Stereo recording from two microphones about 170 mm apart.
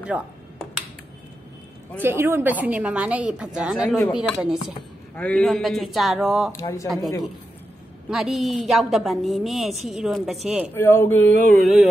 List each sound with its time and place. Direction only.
0.1 s a woman's voice: 10° right (ahead or behind)
2.0 s a woman's voice: 15° right (ahead or behind)
6.5 s speech: 20° left (ahead or behind)
8.1 s a woman's voice: 5° right (ahead or behind)
10.7 s speech: 15° left (ahead or behind)